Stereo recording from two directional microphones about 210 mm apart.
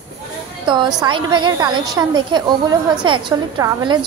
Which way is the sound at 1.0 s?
20° right (ahead or behind).